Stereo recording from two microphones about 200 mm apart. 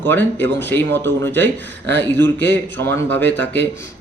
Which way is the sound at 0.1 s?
10° left (ahead or behind).